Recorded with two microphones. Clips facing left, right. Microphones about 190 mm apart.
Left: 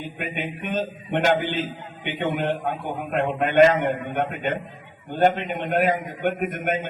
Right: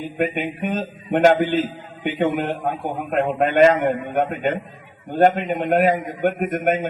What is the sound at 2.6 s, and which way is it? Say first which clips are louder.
A man's voice: right 3 dB; 45° right (ahead or behind).